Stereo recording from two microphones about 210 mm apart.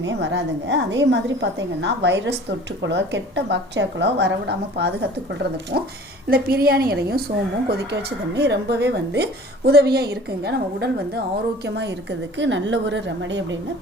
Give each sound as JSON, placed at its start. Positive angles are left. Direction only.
{"t": 0.0, "sound": "a woman's voice", "side_deg": -60}